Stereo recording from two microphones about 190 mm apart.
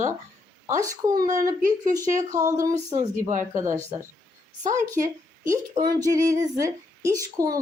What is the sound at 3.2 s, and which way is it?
Speech, 40° right (ahead or behind).